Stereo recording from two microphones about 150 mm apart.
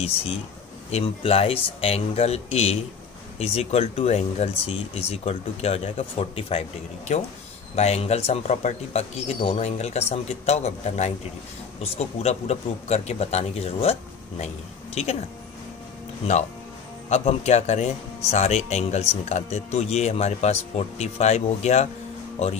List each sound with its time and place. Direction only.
0.9 s a man's voice: 40° left (ahead or behind)
7.7 s a man's voice: 45° left (ahead or behind)
15.0 s a man's voice: 45° left (ahead or behind)
16.2 s a man's voice: 40° left (ahead or behind)